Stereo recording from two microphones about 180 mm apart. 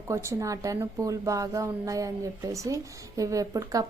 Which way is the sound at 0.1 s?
15° right (ahead or behind).